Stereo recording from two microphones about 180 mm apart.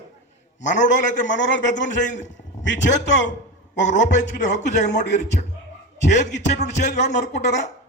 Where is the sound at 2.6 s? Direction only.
85° left.